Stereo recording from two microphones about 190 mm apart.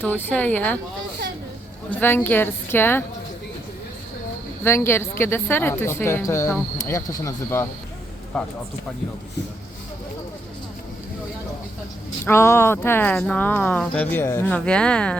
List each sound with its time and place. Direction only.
0.0 s speech: 10° left (ahead or behind)
1.9 s speech: 10° left (ahead or behind)
4.6 s speech: 15° left (ahead or behind)
8.3 s speech: 5° left (ahead or behind)
12.2 s speech: 15° left (ahead or behind)